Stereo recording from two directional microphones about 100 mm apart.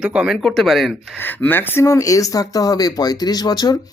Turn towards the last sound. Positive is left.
turn(degrees=40)  # may be behind; listen again after turning